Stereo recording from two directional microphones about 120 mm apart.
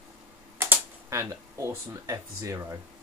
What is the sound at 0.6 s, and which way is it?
Speech, 20° right (ahead or behind).